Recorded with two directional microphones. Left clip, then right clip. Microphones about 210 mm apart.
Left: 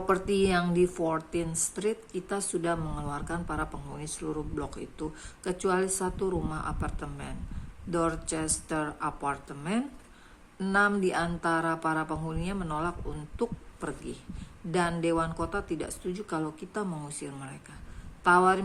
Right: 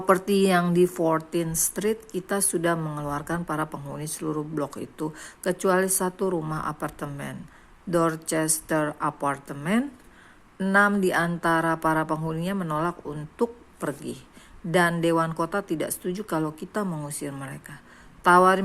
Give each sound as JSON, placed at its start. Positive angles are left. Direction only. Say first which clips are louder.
{"t": 0.0, "sound": "a woman's voice", "louder": "right 5 dB", "side_deg": -25}